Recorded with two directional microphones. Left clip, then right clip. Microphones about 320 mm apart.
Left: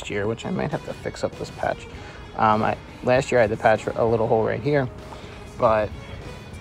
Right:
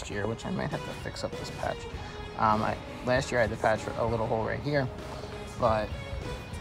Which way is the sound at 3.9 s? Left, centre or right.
Centre.